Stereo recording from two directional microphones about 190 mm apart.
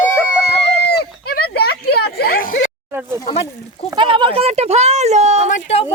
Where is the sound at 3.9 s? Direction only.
25° right (ahead or behind).